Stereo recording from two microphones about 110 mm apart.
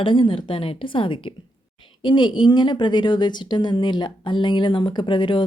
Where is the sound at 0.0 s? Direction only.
50° left (ahead or behind).